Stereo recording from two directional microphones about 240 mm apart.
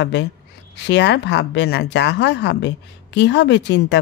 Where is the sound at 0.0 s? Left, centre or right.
Left.